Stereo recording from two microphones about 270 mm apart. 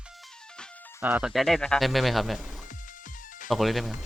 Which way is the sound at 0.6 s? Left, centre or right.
Centre.